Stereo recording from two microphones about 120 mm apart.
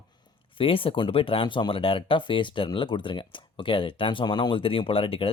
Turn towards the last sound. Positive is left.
turn(degrees=50)  # may be behind; listen again after turning